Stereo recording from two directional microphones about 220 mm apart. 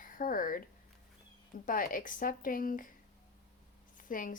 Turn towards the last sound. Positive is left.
turn(degrees=40)  # may be behind; listen again after turning